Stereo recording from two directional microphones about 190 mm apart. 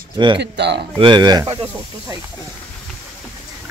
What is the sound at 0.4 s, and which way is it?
Speech, 65° right (ahead or behind).